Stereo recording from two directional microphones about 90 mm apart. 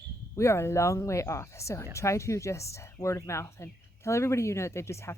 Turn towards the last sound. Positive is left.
turn(degrees=30)  # may be behind; listen again after turning